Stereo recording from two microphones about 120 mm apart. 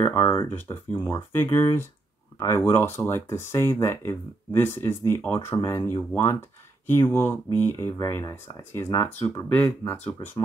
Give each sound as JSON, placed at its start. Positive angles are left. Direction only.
{"t": 0.0, "sound": "speech", "side_deg": 20}